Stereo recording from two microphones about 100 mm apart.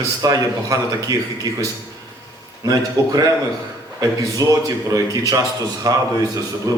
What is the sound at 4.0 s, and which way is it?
A man's voice, 35° right (ahead or behind).